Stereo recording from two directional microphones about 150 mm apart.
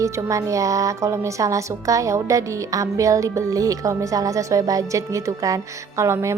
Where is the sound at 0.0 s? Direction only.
20° right (ahead or behind).